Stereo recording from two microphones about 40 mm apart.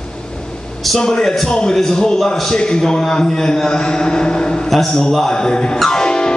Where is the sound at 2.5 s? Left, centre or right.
Centre.